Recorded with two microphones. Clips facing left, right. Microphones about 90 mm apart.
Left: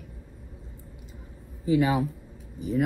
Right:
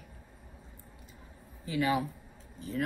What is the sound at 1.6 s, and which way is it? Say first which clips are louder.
Speech: left 7 dB; 25° left (ahead or behind).